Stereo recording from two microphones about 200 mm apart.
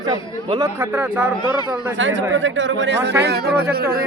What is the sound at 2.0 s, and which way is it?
Speech, 70° right (ahead or behind).